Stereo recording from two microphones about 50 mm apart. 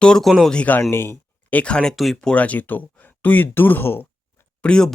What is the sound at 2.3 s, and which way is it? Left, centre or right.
Speech, left.